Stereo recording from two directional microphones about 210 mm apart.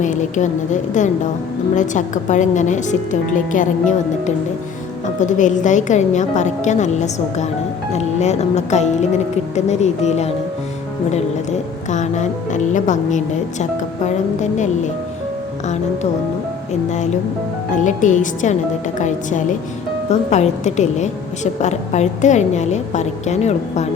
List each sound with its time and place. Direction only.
0.0 s a woman's voice: 35° left (ahead or behind)
5.2 s a woman's voice: 35° left (ahead or behind)
11.9 s a woman's voice: 35° left (ahead or behind)
17.7 s a woman's voice: 35° left (ahead or behind)